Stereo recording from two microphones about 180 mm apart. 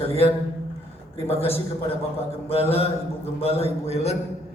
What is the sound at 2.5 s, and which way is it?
Speech, 35° left (ahead or behind).